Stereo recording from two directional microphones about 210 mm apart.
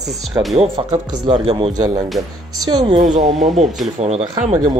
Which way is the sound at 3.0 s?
35° right (ahead or behind).